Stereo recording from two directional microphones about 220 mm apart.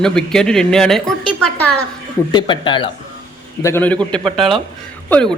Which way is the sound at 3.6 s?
10° left (ahead or behind).